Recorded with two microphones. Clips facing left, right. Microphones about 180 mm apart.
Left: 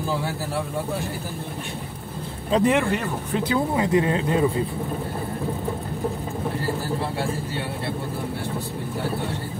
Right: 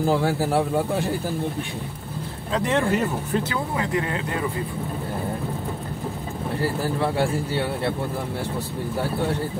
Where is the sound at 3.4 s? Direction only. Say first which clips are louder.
Left 4 dB; 20° left (ahead or behind).